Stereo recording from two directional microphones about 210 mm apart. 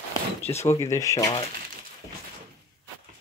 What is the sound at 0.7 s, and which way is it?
Speech, 15° left (ahead or behind).